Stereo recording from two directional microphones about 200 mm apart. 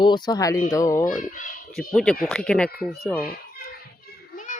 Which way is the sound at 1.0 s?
40° left (ahead or behind).